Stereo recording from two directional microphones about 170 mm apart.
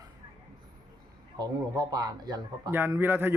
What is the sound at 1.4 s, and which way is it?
Speech, 25° right (ahead or behind).